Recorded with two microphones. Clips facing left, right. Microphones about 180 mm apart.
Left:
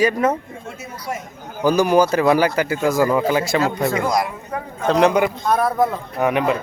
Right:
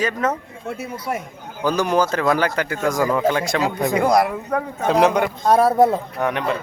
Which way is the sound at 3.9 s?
60° right (ahead or behind).